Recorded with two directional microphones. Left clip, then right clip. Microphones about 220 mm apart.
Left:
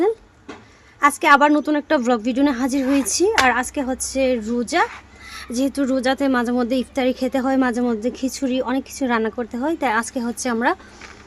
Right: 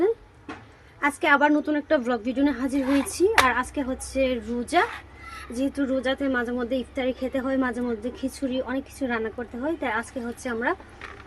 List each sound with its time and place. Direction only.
1.0 s a woman's voice: 40° left (ahead or behind)